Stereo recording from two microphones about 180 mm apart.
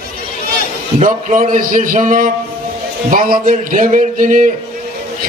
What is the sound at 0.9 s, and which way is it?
A man's voice, 45° right (ahead or behind).